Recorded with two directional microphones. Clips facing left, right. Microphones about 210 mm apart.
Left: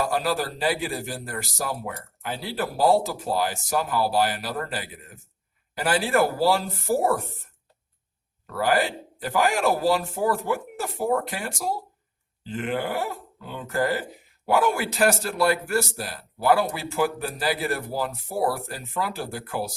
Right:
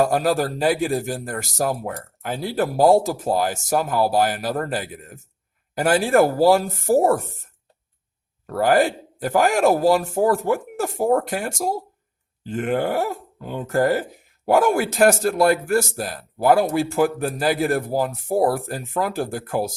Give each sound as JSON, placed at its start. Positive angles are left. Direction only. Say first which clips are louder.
{"t": 0.0, "sound": "a man's voice", "louder": "right 6 dB", "side_deg": -45}
{"t": 8.4, "sound": "a man's voice", "louder": "right 6 dB", "side_deg": -45}